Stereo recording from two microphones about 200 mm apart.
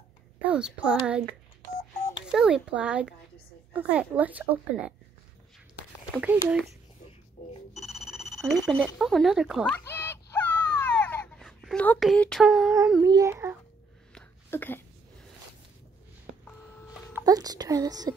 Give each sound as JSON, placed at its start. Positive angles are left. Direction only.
{"t": 0.4, "sound": "speech", "side_deg": -5}
{"t": 1.8, "sound": "telephone dialing", "side_deg": 15}
{"t": 2.3, "sound": "a woman's voice", "side_deg": -5}
{"t": 6.2, "sound": "speech", "side_deg": -5}
{"t": 7.7, "sound": "telephone bell ringing", "side_deg": 0}
{"t": 13.0, "sound": "a child's voice", "side_deg": -15}
{"t": 14.1, "sound": "a sound", "side_deg": 10}
{"t": 17.2, "sound": "a woman's voice", "side_deg": -20}